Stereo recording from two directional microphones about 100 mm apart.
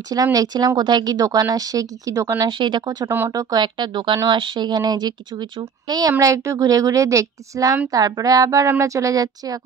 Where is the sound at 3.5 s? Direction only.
50° right (ahead or behind).